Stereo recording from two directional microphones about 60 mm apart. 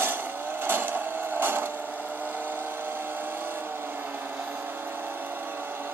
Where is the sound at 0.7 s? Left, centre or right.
Right.